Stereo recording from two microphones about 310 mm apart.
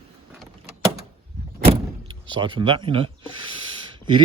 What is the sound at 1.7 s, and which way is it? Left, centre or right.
Vehicle, centre.